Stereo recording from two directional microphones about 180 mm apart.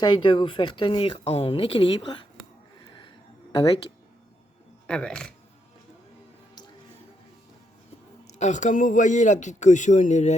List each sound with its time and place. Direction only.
0.0 s speech: 25° left (ahead or behind)
3.5 s speech: 30° left (ahead or behind)
4.9 s speech: 5° left (ahead or behind)
8.3 s speech: 40° left (ahead or behind)